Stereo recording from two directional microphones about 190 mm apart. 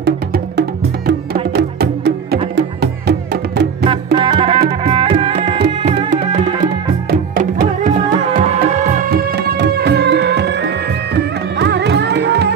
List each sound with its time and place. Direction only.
0.0 s music: 60° right (ahead or behind)
3.8 s music: 25° right (ahead or behind)
7.1 s music: 45° right (ahead or behind); by 12.5 s 65° right (ahead or behind)